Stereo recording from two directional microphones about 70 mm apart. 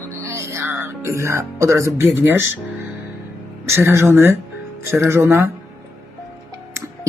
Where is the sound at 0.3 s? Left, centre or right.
Right.